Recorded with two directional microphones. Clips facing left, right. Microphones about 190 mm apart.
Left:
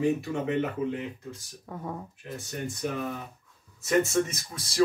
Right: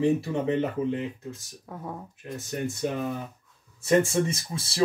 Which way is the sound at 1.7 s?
Centre (ahead or behind).